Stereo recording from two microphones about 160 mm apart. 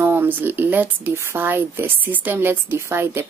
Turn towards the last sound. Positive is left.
turn(degrees=-15)  # may be behind; listen again after turning